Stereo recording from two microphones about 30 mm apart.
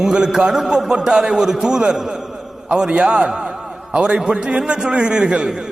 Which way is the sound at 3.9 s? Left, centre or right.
Right.